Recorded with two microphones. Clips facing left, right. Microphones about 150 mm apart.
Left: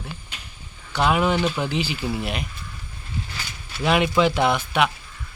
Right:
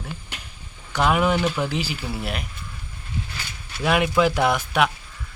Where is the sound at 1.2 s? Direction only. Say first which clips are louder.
Even; 10° right (ahead or behind).